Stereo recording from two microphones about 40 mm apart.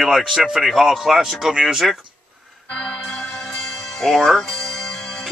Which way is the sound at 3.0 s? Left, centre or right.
Centre.